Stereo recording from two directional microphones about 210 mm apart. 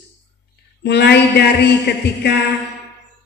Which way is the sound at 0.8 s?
55° left (ahead or behind).